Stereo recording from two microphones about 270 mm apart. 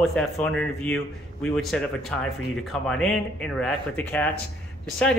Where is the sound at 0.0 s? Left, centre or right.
Centre.